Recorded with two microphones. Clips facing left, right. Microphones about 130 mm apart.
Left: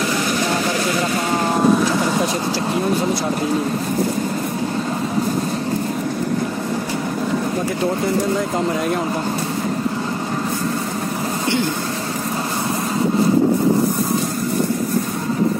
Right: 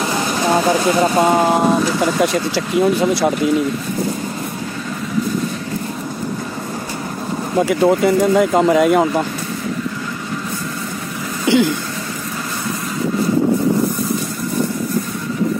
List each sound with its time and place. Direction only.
0.0 s vehicle: 25° right (ahead or behind)
7.6 s speech: 85° right
11.4 s a sound: 90° right